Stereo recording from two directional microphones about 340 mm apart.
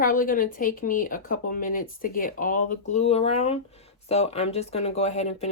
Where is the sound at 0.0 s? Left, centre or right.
Left.